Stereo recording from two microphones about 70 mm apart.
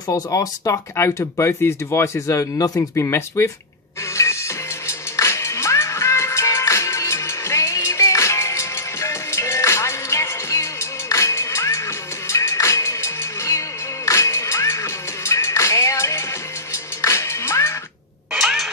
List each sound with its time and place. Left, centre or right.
0.1 s speech: left
0.9 s speech: left
2.9 s speech: left
4.1 s music: left
18.3 s cat: centre